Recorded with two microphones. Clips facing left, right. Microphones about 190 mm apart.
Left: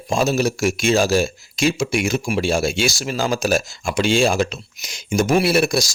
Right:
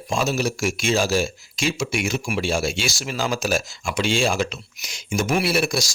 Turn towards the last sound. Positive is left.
turn(degrees=40)  # may be behind; listen again after turning